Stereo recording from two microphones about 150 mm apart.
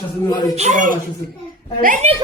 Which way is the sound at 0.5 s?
50° right (ahead or behind).